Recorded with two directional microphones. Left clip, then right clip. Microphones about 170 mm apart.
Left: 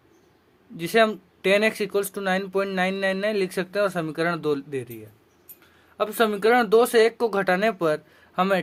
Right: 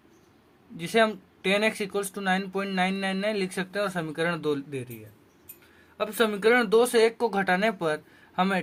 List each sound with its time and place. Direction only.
0.8 s speech: 30° left (ahead or behind)
6.0 s speech: 35° left (ahead or behind)